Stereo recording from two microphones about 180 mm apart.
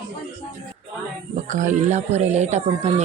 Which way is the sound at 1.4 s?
45° right (ahead or behind).